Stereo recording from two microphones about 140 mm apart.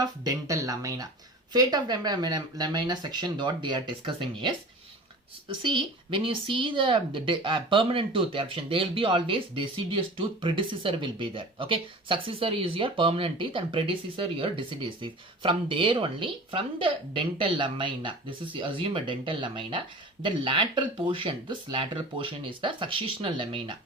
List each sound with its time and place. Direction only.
0.0 s speech: 25° right (ahead or behind)